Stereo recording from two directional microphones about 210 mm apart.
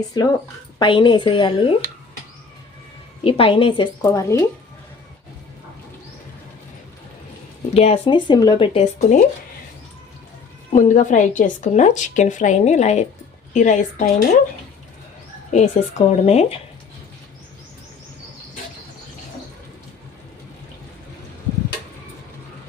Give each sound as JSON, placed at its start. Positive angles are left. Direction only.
{"t": 0.1, "sound": "speech", "side_deg": 20}
{"t": 3.2, "sound": "speech", "side_deg": 25}
{"t": 7.7, "sound": "speech", "side_deg": 30}
{"t": 10.7, "sound": "a woman's voice", "side_deg": 35}
{"t": 15.5, "sound": "a woman's voice", "side_deg": 35}